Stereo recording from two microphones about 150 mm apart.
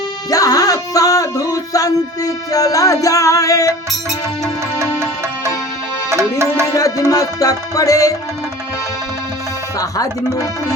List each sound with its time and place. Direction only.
0.3 s music: 25° left (ahead or behind)
6.7 s music: 25° left (ahead or behind)